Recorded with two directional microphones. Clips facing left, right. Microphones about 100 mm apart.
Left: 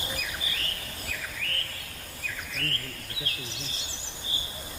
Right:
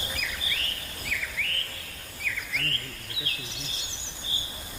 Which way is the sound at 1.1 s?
40° left (ahead or behind).